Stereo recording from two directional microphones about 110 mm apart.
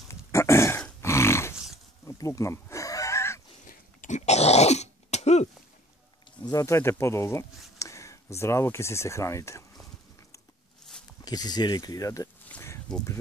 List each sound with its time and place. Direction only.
0.1 s throat clearing: 25° left (ahead or behind)
1.0 s dog: 25° left (ahead or behind)
2.0 s a sound: 30° left (ahead or behind)
4.1 s speech: 85° left
6.4 s speech: 30° left (ahead or behind)
11.2 s speech: 35° left (ahead or behind)
12.5 s a sound: 15° left (ahead or behind)